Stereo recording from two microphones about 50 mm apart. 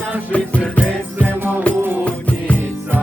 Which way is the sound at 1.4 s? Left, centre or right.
Right.